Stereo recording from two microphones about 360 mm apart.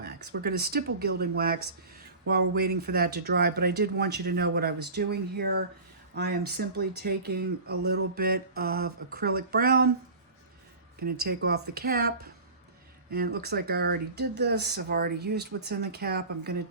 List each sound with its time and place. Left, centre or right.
0.0 s speech: right
11.0 s speech: right